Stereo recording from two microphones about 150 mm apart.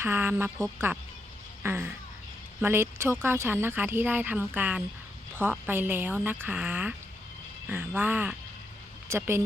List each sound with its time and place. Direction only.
0.0 s a woman's voice: 15° right (ahead or behind)